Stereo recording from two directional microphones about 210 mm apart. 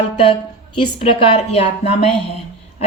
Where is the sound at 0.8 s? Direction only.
25° left (ahead or behind).